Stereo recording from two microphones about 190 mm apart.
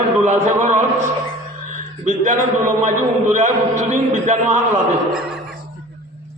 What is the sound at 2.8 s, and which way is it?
A man's voice, 40° right (ahead or behind).